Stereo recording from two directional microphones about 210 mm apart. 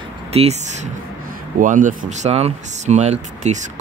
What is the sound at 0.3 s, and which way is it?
Speech, 30° right (ahead or behind).